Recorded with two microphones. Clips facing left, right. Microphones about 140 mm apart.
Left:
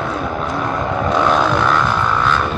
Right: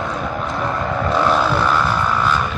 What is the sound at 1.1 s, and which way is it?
Vehicle, 5° right (ahead or behind).